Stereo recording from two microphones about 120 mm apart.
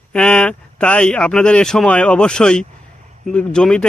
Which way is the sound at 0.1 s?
10° left (ahead or behind).